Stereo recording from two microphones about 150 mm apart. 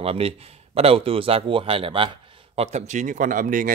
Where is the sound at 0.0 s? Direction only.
40° right (ahead or behind).